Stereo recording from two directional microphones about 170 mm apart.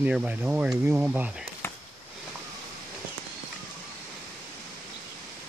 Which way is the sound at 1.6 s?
15° left (ahead or behind).